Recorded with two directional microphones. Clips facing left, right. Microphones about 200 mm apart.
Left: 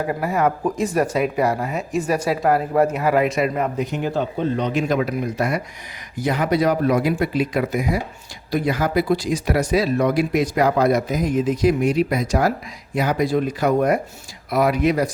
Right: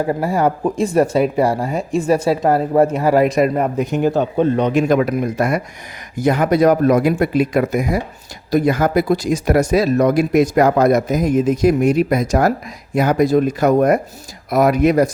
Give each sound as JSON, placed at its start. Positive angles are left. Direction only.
{"t": 0.1, "sound": "speech", "side_deg": -30}